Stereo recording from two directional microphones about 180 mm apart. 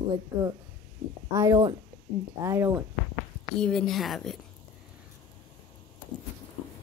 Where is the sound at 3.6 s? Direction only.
5° left (ahead or behind).